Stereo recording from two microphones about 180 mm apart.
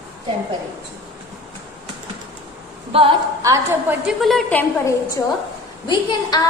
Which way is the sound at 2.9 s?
30° right (ahead or behind).